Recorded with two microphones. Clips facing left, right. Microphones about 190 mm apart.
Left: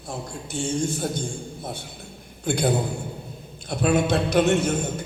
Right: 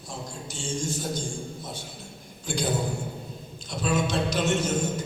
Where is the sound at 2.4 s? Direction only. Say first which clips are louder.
Left 6 dB; 60° left (ahead or behind).